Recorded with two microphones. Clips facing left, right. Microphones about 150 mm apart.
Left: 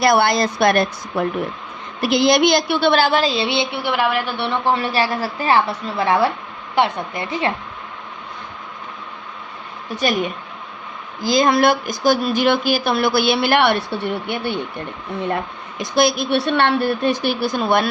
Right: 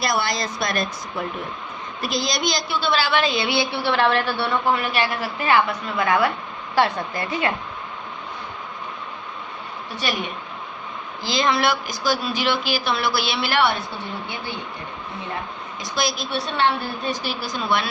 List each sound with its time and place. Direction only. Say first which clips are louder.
0.0 s a woman's voice: left 8 dB; 60° left (ahead or behind); by 4.5 s 20° left (ahead or behind)
4.6 s a woman's voice: left 6 dB; 30° left (ahead or behind)
11.2 s speech: left 6 dB; 45° left (ahead or behind); by 14.6 s 65° left (ahead or behind)
15.8 s a woman's voice: left 9 dB; 55° left (ahead or behind)